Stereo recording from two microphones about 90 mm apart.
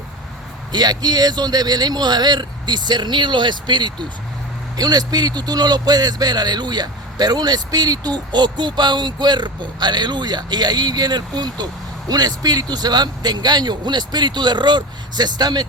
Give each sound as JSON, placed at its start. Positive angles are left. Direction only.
{"t": 0.7, "sound": "speech", "side_deg": -50}
{"t": 4.8, "sound": "speech", "side_deg": -45}